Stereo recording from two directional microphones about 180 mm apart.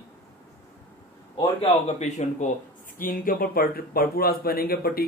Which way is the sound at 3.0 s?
50° left (ahead or behind).